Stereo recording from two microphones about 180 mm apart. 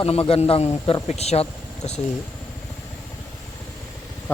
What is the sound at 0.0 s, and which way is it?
A man's voice, 35° left (ahead or behind).